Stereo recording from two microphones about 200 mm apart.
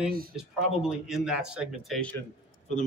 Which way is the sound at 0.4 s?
5° right (ahead or behind).